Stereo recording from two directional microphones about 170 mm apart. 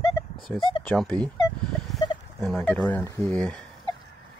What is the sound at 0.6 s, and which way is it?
Speech, 30° left (ahead or behind).